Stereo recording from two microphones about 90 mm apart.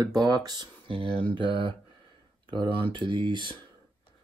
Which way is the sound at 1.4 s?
70° right (ahead or behind).